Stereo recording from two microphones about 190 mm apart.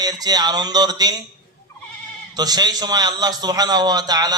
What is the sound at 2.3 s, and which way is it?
A man's voice, 20° right (ahead or behind).